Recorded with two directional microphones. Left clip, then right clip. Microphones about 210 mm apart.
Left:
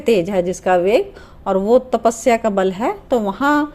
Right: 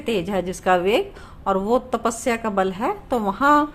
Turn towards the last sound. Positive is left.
turn(degrees=15)  # may be behind; listen again after turning